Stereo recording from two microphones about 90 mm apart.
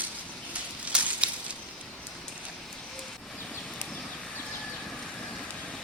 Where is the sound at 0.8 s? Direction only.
15° right (ahead or behind).